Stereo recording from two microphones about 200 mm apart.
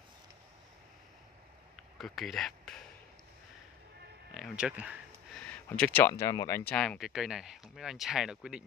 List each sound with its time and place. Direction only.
2.0 s speech: centre (ahead or behind)
4.3 s speech: centre (ahead or behind)
5.5 s speech: 10° left (ahead or behind)
6.7 s speech: 5° left (ahead or behind)